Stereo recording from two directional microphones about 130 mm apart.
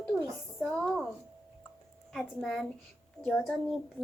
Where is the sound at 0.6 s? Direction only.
5° left (ahead or behind).